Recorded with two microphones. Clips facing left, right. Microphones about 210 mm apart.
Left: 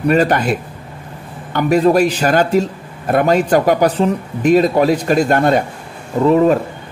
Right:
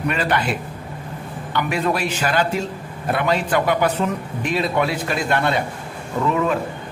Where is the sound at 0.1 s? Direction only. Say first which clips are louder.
Left 10 dB; 45° left (ahead or behind).